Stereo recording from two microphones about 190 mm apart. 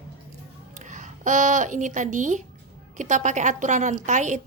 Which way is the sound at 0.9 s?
40° right (ahead or behind).